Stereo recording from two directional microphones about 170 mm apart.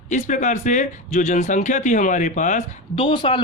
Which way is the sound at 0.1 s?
45° left (ahead or behind).